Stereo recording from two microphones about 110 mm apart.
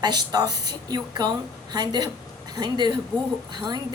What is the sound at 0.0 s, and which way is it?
A woman's voice, 40° right (ahead or behind).